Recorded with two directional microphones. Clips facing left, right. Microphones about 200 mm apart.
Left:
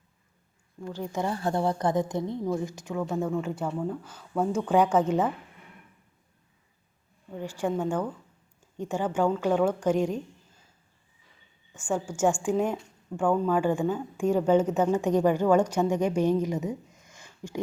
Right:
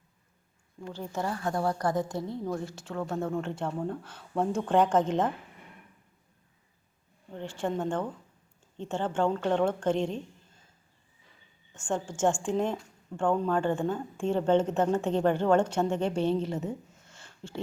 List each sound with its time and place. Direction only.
0.9 s a woman's voice: 15° left (ahead or behind)
1.4 s a woman's voice: 30° left (ahead or behind); by 5.3 s 10° left (ahead or behind)
7.3 s a woman's voice: 10° left (ahead or behind)
11.7 s a woman's voice: 10° left (ahead or behind)